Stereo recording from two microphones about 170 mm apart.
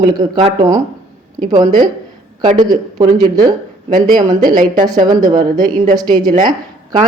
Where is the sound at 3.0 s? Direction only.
25° right (ahead or behind).